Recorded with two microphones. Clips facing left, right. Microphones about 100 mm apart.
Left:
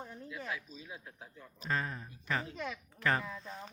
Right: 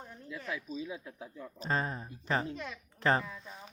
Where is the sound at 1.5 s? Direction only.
30° right (ahead or behind).